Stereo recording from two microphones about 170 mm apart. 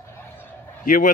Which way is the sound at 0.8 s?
50° left (ahead or behind).